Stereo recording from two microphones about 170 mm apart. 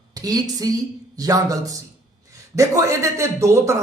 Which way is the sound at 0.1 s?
20° right (ahead or behind).